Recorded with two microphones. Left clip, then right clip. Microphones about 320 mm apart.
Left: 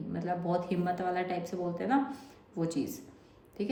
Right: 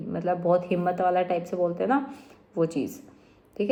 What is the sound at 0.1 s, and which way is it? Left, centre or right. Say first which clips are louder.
A woman's voice: right 9 dB; centre.